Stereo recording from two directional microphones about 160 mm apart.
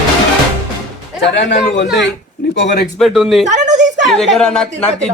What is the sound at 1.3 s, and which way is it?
Speech, 90° left.